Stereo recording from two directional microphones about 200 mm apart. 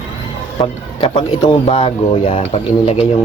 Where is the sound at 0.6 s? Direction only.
30° left (ahead or behind).